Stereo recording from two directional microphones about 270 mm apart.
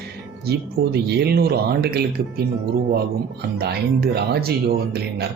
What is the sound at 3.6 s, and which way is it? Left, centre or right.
Speech, right.